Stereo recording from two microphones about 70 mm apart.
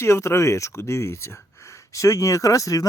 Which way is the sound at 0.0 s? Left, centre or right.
Left.